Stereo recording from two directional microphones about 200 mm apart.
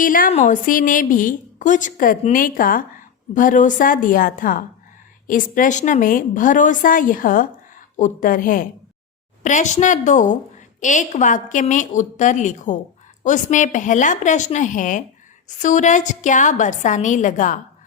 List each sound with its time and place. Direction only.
0.0 s a woman's voice: 45° left (ahead or behind)